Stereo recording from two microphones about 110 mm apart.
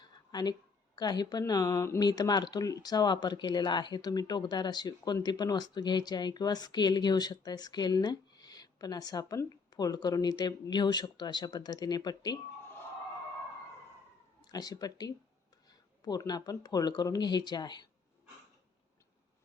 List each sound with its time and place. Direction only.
0.0 s a sound: 40° left (ahead or behind)
0.9 s speech: 40° left (ahead or behind)
14.4 s speech: 35° left (ahead or behind)